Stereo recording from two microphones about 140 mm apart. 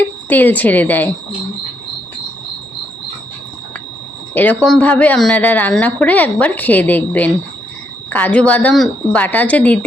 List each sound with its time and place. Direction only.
0.3 s a woman's voice: 15° left (ahead or behind)
4.4 s a woman's voice: 5° left (ahead or behind)